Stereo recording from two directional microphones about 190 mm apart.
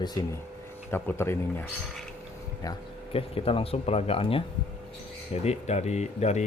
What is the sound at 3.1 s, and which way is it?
Speech, 30° left (ahead or behind).